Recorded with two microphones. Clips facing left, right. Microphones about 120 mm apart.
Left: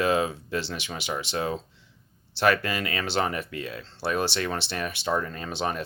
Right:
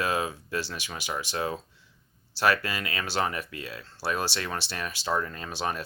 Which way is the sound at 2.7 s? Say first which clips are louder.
Left 3 dB; 40° left (ahead or behind).